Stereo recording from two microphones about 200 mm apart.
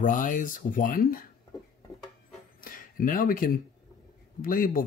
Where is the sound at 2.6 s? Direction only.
45° left (ahead or behind).